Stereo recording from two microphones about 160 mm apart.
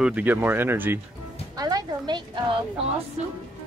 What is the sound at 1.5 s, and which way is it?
Music, 25° right (ahead or behind).